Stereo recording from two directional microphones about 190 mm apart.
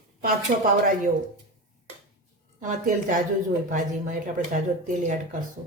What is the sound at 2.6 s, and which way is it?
A woman's voice, 40° right (ahead or behind).